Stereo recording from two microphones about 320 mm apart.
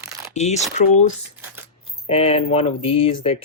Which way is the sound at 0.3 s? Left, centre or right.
Left.